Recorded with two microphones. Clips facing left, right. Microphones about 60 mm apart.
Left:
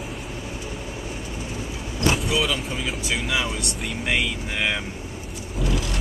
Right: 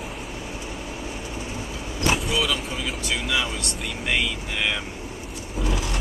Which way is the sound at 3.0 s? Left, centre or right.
Centre.